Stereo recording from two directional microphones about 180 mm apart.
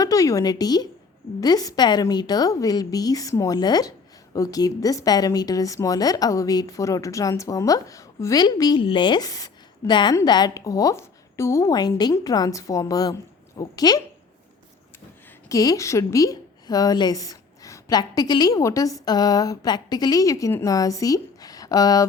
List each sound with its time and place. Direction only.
0.0 s a woman's voice: 20° left (ahead or behind)
15.4 s a woman's voice: 20° left (ahead or behind)